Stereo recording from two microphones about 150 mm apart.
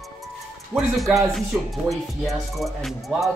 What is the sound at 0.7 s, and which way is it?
Speech, centre (ahead or behind).